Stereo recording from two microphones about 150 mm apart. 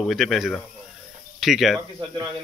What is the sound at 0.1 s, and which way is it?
Speech, centre (ahead or behind).